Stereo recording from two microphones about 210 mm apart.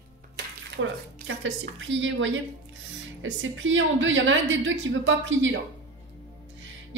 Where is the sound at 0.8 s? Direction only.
70° right (ahead or behind).